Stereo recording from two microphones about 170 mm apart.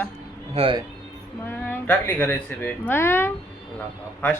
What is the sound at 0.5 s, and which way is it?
Speech, 30° right (ahead or behind).